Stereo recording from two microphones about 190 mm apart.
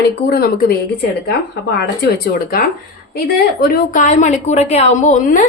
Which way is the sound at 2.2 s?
50° left (ahead or behind).